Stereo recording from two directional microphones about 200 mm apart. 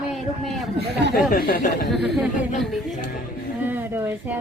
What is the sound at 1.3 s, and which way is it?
Speech, 45° left (ahead or behind).